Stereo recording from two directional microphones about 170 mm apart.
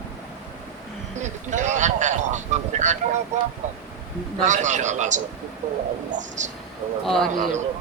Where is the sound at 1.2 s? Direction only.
45° right (ahead or behind).